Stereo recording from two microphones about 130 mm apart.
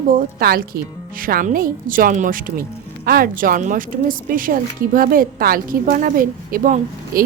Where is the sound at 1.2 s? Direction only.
90° right.